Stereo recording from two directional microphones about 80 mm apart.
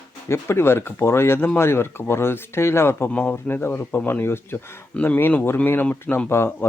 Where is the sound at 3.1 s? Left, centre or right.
Centre.